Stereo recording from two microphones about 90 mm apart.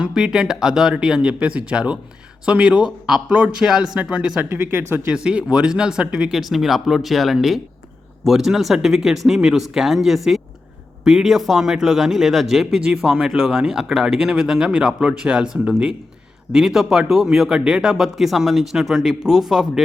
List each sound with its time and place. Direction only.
0.0 s speech: 10° right (ahead or behind)
4.4 s speech: 25° right (ahead or behind)
5.0 s speech: 10° right (ahead or behind)